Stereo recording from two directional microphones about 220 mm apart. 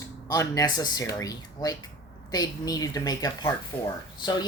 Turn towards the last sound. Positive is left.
turn(degrees=20)  # may be behind; listen again after turning